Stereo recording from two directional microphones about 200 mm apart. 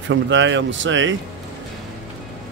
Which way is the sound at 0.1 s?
65° right (ahead or behind).